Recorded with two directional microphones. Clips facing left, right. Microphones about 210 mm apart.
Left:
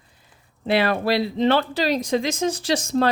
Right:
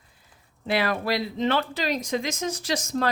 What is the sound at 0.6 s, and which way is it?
Speech, 30° left (ahead or behind).